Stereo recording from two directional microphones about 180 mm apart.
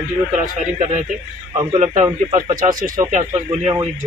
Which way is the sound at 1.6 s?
30° right (ahead or behind).